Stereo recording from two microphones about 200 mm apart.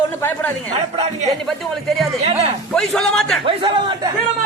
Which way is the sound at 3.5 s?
25° right (ahead or behind).